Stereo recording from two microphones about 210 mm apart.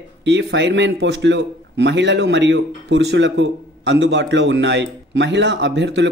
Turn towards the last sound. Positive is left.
turn(degrees=-60)  # may be behind; listen again after turning